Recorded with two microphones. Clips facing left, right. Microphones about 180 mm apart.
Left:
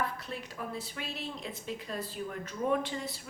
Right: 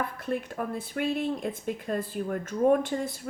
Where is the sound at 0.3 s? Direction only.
55° right (ahead or behind).